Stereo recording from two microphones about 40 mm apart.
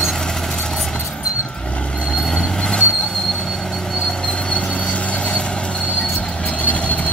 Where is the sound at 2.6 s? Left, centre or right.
Left.